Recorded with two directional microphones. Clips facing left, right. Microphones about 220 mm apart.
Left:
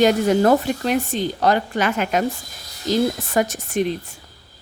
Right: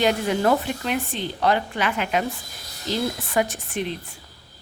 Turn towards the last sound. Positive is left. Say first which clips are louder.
# left 7 dB
turn(degrees=45)  # may be behind; listen again after turning